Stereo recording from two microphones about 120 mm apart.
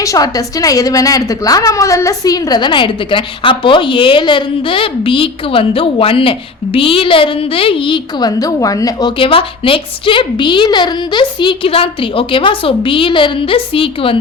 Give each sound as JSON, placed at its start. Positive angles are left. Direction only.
{"t": 0.0, "sound": "a woman's voice", "side_deg": 30}
{"t": 9.1, "sound": "a woman's voice", "side_deg": 45}